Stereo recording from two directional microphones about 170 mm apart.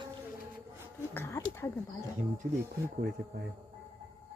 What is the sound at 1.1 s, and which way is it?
Speech, 15° left (ahead or behind).